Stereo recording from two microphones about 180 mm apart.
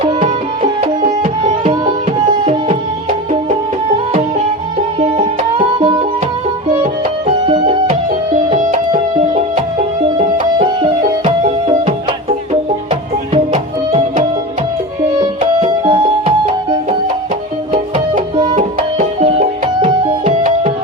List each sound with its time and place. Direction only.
0.0 s music: 45° right (ahead or behind)
4.9 s music: 30° right (ahead or behind)
7.3 s music: 30° right (ahead or behind)
8.4 s music: 40° right (ahead or behind)
13.3 s music: 30° right (ahead or behind)
17.9 s music: 30° right (ahead or behind)